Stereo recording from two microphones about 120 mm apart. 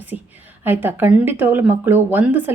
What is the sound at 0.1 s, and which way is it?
A woman's voice, 10° right (ahead or behind).